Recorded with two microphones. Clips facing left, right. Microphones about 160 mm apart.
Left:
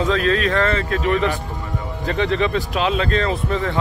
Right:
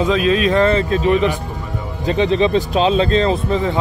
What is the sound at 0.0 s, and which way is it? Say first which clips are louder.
Speech: right 3 dB; 15° right (ahead or behind).